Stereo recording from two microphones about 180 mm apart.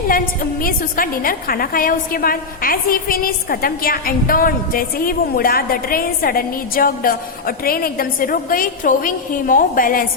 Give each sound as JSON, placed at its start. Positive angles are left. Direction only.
{"t": 0.6, "sound": "a woman's voice", "side_deg": 50}